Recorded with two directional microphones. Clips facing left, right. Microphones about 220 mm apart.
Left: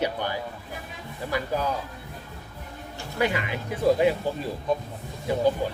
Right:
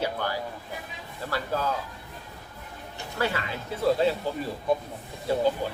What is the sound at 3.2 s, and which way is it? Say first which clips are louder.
Speech: left 3 dB; 15° left (ahead or behind).